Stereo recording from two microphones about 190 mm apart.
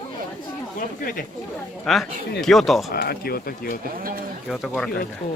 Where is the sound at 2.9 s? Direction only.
55° left (ahead or behind).